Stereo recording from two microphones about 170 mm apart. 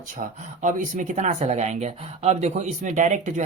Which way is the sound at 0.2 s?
50° right (ahead or behind).